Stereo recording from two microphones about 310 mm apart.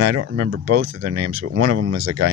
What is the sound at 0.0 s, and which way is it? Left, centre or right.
Speech, right.